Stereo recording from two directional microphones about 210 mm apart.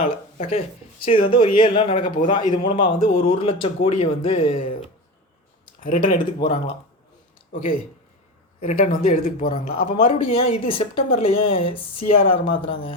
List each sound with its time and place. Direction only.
0.0 s a man's voice: 30° left (ahead or behind)
8.6 s speech: 35° left (ahead or behind)
9.7 s a man's voice: 25° left (ahead or behind)